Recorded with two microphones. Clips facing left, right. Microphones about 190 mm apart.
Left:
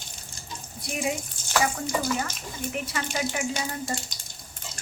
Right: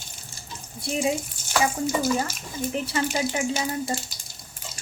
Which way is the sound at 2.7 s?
30° right (ahead or behind).